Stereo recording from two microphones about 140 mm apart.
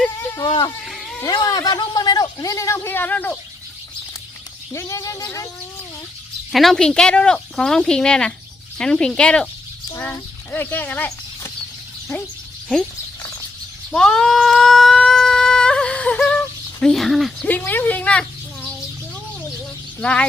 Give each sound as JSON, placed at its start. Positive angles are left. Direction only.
{"t": 0.0, "sound": "a sound", "side_deg": 10}
{"t": 0.4, "sound": "speech", "side_deg": 35}
{"t": 0.9, "sound": "a sound", "side_deg": 0}
{"t": 1.2, "sound": "a man's voice", "side_deg": 25}
{"t": 4.7, "sound": "a man's voice", "side_deg": 20}
{"t": 6.5, "sound": "speech", "side_deg": 0}
{"t": 13.9, "sound": "a sound", "side_deg": 5}
{"t": 17.5, "sound": "speech", "side_deg": 15}
{"t": 20.0, "sound": "speech", "side_deg": 10}